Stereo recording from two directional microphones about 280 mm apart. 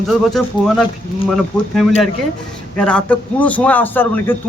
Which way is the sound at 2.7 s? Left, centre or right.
Centre.